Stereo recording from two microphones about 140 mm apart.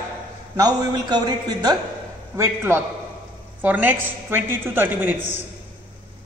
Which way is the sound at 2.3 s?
20° right (ahead or behind).